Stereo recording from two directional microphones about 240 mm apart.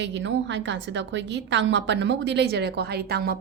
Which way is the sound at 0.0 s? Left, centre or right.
Right.